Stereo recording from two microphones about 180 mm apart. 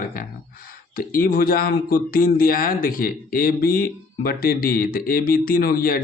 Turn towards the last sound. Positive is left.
turn(degrees=55)  # may be behind; listen again after turning